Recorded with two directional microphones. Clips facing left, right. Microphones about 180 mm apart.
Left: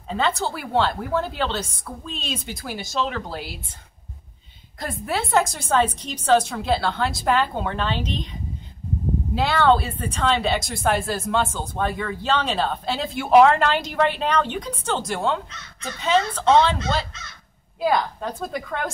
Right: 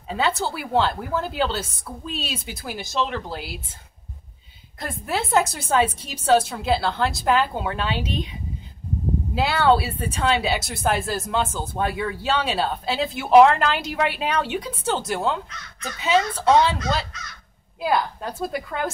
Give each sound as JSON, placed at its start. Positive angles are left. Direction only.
{"t": 0.1, "sound": "a woman's voice", "side_deg": -5}
{"t": 4.7, "sound": "a woman's voice", "side_deg": 0}
{"t": 16.4, "sound": "speech", "side_deg": 25}
{"t": 17.8, "sound": "a woman's voice", "side_deg": -5}